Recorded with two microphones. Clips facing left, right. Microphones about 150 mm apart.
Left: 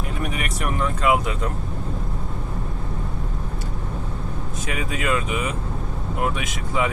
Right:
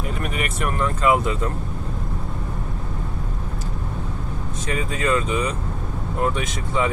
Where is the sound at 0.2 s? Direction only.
Centre (ahead or behind).